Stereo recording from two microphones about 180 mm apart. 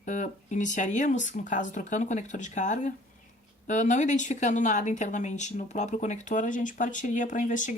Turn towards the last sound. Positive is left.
turn(degrees=45)  # may be behind; listen again after turning